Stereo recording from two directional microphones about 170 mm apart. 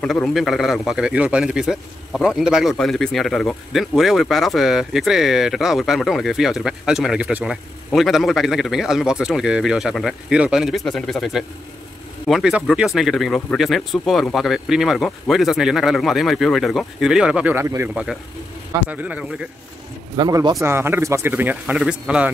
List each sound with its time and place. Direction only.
0.0 s speech: centre (ahead or behind); by 17.8 s 15° right (ahead or behind)
18.9 s a man's voice: 10° right (ahead or behind)
20.2 s a man's voice: 25° right (ahead or behind); by 22.3 s 5° right (ahead or behind)